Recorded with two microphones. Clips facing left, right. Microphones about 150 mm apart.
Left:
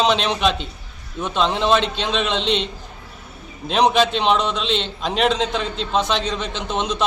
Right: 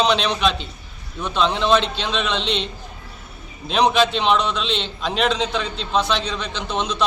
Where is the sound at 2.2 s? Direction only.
45° left (ahead or behind).